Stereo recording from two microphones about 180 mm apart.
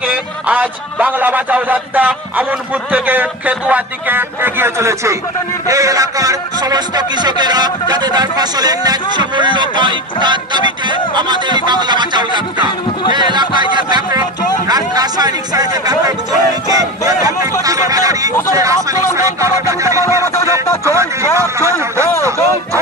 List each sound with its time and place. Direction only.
0.1 s a man's voice: 5° right (ahead or behind)